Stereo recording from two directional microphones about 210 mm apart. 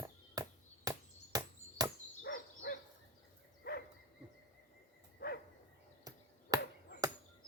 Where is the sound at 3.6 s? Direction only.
50° left (ahead or behind).